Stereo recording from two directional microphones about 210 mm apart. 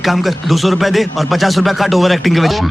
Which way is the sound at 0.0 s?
Centre (ahead or behind).